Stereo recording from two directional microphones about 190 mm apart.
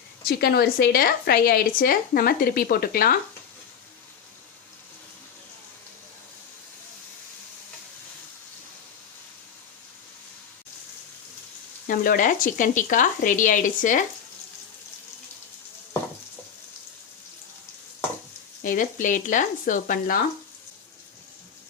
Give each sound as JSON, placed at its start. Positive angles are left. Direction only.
{"t": 0.3, "sound": "a woman's voice", "side_deg": 55}
{"t": 11.9, "sound": "a woman's voice", "side_deg": 45}
{"t": 18.6, "sound": "a woman's voice", "side_deg": 45}